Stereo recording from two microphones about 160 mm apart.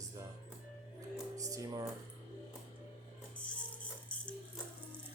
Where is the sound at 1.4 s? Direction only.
20° right (ahead or behind).